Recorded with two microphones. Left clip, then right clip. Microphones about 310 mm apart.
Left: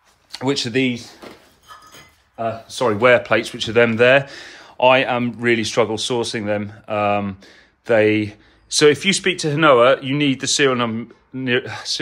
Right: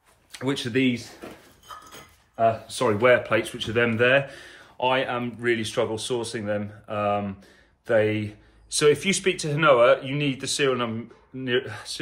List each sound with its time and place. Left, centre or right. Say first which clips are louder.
0.4 s speech: left 6 dB; centre
2.3 s speech: right 2 dB; centre